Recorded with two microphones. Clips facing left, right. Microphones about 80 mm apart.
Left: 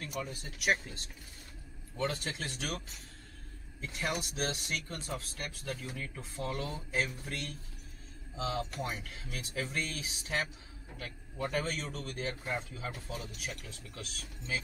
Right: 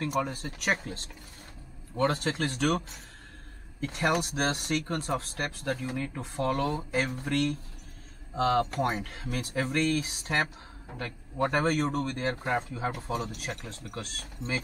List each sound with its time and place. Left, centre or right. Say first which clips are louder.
0.0 s speech: right 10 dB; right
2.0 s speech: right 8 dB; right
3.8 s speech: right 9 dB; right
5.3 s speech: right 8 dB; right
14.1 s speech: right 3 dB; right